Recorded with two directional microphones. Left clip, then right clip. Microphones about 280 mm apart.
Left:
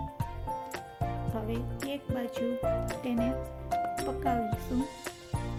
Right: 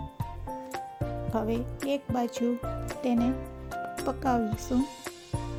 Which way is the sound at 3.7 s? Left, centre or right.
Centre.